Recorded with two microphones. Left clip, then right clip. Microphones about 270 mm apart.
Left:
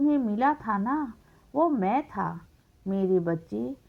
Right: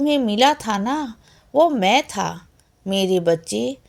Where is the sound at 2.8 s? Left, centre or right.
Left.